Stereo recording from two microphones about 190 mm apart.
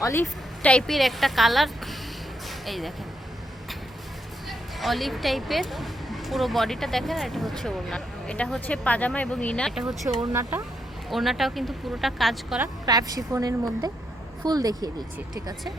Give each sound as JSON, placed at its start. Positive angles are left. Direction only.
{"t": 0.0, "sound": "speech", "side_deg": 15}
{"t": 4.4, "sound": "speech", "side_deg": 0}
{"t": 10.2, "sound": "speech", "side_deg": -15}
{"t": 11.1, "sound": "speech", "side_deg": 0}
{"t": 12.8, "sound": "a woman's voice", "side_deg": -20}